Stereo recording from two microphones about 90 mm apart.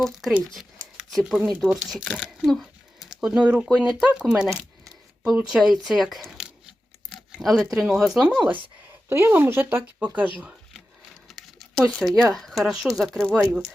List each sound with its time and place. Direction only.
0.0 s speech: centre (ahead or behind)
0.5 s a sound: centre (ahead or behind)
1.6 s speech: 5° right (ahead or behind)
2.4 s a sound: centre (ahead or behind)
3.2 s speech: 10° right (ahead or behind)
9.0 s speech: 25° right (ahead or behind)
11.3 s speech: centre (ahead or behind)